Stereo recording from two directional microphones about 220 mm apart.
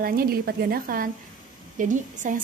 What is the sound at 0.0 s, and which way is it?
A woman's voice, 45° right (ahead or behind).